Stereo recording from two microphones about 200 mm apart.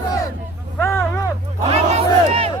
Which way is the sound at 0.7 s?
10° left (ahead or behind).